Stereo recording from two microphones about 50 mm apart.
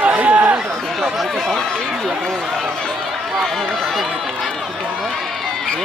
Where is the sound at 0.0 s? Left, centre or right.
Right.